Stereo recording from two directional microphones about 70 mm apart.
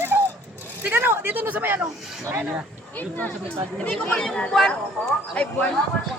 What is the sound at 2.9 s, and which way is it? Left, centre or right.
Speech, left.